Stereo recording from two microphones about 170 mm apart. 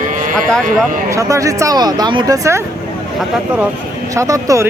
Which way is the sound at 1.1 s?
20° right (ahead or behind).